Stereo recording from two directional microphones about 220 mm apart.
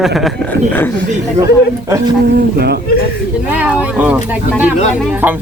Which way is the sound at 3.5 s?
5° right (ahead or behind).